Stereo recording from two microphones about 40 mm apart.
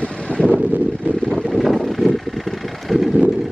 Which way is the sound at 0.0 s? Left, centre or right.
Left.